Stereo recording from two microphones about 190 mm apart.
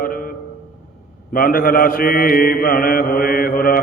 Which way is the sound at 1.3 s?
50° left (ahead or behind).